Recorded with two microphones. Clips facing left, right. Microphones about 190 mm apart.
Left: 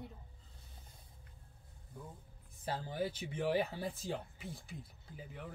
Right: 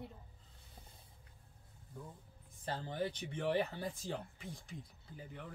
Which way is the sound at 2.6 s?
5° left (ahead or behind).